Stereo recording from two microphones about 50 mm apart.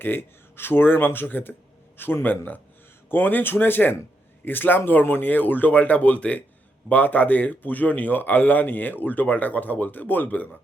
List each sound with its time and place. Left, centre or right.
0.0 s speech: left